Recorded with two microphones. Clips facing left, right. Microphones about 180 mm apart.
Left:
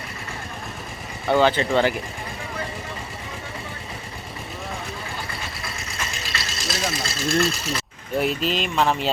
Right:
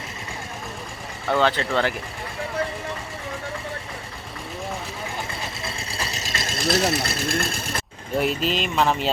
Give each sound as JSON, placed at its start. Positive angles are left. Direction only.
{"t": 1.3, "sound": "speech", "side_deg": 0}
{"t": 5.3, "sound": "engine", "side_deg": -30}
{"t": 8.1, "sound": "speech", "side_deg": 0}